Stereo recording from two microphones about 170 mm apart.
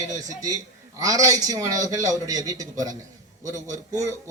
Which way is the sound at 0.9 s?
20° right (ahead or behind).